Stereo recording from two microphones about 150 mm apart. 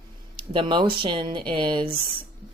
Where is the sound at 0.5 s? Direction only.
35° right (ahead or behind).